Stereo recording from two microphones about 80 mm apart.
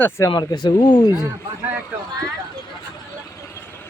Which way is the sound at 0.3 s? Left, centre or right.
Left.